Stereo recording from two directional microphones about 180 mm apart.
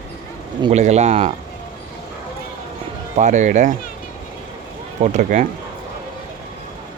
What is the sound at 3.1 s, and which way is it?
Speech, 40° right (ahead or behind).